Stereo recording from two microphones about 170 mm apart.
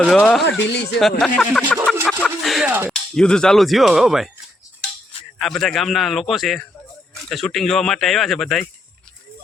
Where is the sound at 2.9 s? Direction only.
5° left (ahead or behind).